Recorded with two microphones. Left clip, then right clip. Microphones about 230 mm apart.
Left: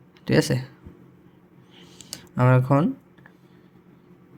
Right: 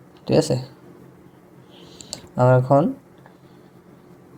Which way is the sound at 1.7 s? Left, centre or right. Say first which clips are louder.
Right 4 dB; left.